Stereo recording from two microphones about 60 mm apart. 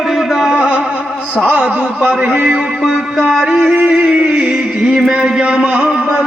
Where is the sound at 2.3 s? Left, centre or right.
Right.